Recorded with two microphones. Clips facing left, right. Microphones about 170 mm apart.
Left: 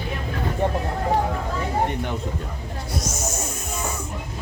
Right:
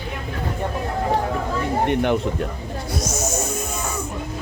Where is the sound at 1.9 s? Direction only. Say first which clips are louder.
Right 8 dB; 75° right (ahead or behind).